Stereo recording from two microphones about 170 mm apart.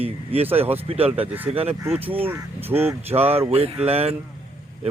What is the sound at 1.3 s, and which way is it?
Speech, 10° right (ahead or behind).